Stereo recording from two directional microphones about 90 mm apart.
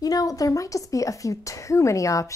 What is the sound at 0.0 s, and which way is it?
A woman's voice, 40° left (ahead or behind).